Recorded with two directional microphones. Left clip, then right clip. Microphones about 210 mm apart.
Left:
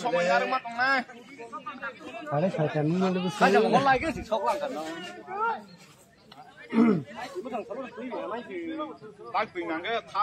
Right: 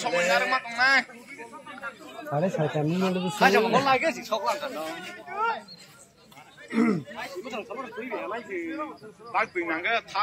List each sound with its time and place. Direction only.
0.0 s speech: 45° left (ahead or behind)
2.2 s speech: 25° right (ahead or behind)
3.3 s speech: 45° left (ahead or behind)
5.3 s a sound: 45° left (ahead or behind)
6.7 s speech: 30° left (ahead or behind)
7.2 s speech: 45° left (ahead or behind)